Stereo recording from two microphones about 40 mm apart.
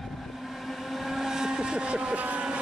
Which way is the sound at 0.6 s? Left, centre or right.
Centre.